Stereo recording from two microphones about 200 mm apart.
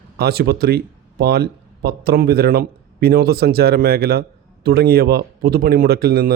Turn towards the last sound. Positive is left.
turn(degrees=-50)  # may be behind; listen again after turning